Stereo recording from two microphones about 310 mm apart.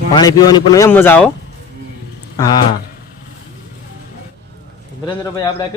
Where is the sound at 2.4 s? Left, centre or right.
Centre.